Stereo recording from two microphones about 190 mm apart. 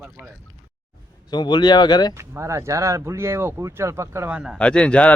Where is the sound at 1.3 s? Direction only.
20° left (ahead or behind).